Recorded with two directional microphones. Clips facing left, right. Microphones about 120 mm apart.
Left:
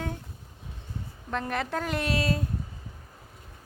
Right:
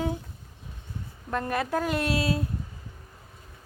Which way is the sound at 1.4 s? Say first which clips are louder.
Right 4 dB; 5° right (ahead or behind).